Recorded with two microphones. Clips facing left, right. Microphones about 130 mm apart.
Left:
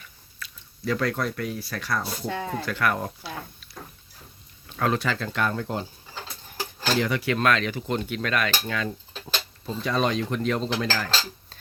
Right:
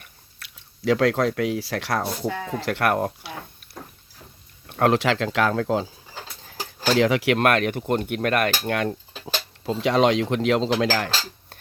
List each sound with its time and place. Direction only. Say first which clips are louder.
0.3 s speech: left 5 dB; 75° right (ahead or behind)
2.6 s speech: right 6 dB; 70° right (ahead or behind)
4.6 s speech: right 6 dB; 65° right (ahead or behind); by 5.7 s 90° right
6.9 s speech: right 6 dB; 90° right; by 8.9 s 60° right (ahead or behind)
9.2 s speech: right 5 dB; 90° right; by 11.5 s 70° right (ahead or behind)